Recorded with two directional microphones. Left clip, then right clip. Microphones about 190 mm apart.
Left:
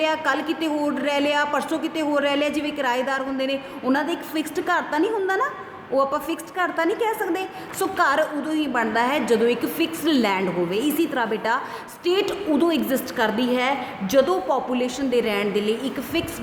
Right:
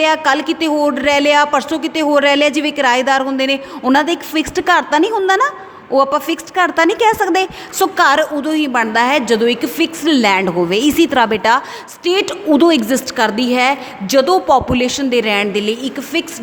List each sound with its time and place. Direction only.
0.0 s a woman's voice: 40° right (ahead or behind)